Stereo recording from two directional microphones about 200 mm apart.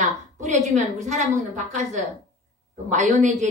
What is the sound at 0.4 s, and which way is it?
A woman's voice, 35° right (ahead or behind).